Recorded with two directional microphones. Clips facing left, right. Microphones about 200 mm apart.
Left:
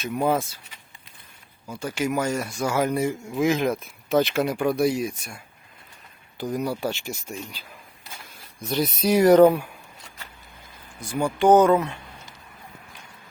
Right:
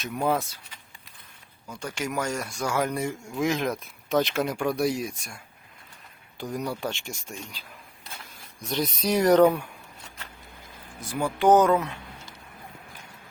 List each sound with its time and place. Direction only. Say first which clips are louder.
0.0 s a man's voice: left 3 dB; centre (ahead or behind)
1.6 s a man's voice: left 6 dB; 5° left (ahead or behind)
8.7 s speech: left 4 dB; 5° left (ahead or behind)
11.0 s a man's voice: left 2 dB; centre (ahead or behind)